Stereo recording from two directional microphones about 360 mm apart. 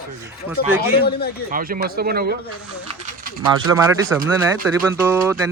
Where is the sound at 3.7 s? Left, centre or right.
Centre.